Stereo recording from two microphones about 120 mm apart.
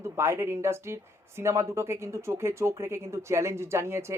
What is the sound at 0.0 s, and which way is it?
Speech, 20° right (ahead or behind).